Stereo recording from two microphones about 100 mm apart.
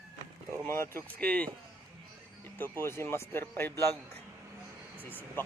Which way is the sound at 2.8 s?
25° left (ahead or behind).